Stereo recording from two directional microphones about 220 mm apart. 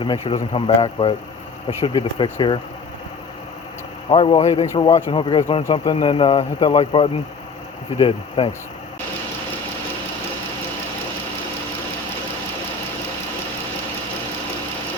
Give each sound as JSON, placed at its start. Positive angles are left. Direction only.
{"t": 0.0, "sound": "speech", "side_deg": 20}
{"t": 4.1, "sound": "speech", "side_deg": 25}
{"t": 4.6, "sound": "speech", "side_deg": 15}